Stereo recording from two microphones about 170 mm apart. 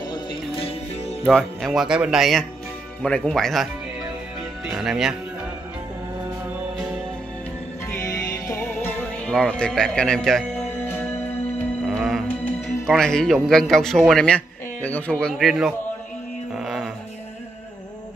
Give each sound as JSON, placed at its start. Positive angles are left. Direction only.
{"t": 0.1, "sound": "music", "side_deg": 30}
{"t": 1.2, "sound": "a man's voice", "side_deg": 0}
{"t": 4.6, "sound": "a man's voice", "side_deg": -5}
{"t": 7.9, "sound": "music", "side_deg": 20}
{"t": 12.8, "sound": "a man's voice", "side_deg": 0}
{"t": 16.5, "sound": "music", "side_deg": 0}